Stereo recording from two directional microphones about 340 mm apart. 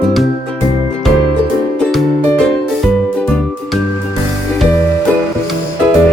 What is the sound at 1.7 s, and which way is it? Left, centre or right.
Music, centre.